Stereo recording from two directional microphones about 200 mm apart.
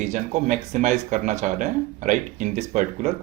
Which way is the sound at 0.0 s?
35° right (ahead or behind).